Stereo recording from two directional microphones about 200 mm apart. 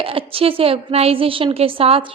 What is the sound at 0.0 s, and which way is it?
A woman's voice, 25° right (ahead or behind).